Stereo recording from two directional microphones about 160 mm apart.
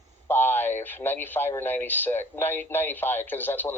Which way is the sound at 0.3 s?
15° left (ahead or behind).